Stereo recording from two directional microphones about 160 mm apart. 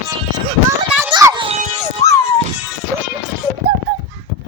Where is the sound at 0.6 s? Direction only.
15° right (ahead or behind).